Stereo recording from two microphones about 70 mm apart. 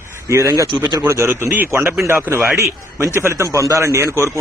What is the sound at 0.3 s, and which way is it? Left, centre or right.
A man's voice, right.